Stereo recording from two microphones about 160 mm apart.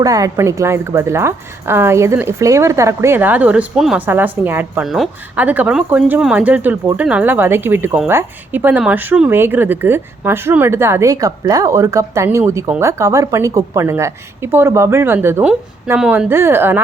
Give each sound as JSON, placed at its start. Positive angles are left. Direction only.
{"t": 0.0, "sound": "a woman's voice", "side_deg": -20}